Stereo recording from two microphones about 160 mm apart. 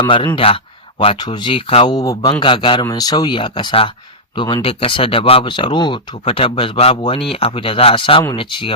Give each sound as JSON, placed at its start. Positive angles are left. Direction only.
{"t": 0.3, "sound": "speech", "side_deg": 35}
{"t": 2.0, "sound": "speech", "side_deg": 25}